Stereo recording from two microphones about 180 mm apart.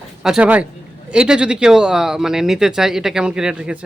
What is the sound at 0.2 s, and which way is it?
Speech, 5° right (ahead or behind).